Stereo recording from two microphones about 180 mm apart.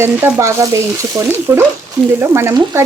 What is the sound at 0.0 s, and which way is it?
Frying, 10° right (ahead or behind).